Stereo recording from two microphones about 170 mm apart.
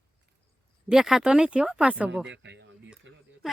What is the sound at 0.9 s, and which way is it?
A woman's voice, 5° right (ahead or behind).